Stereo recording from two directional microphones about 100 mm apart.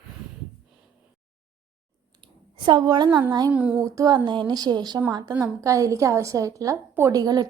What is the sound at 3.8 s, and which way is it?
A woman's voice, 35° right (ahead or behind).